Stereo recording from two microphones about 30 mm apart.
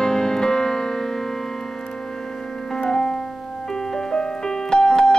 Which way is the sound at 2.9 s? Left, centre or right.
Centre.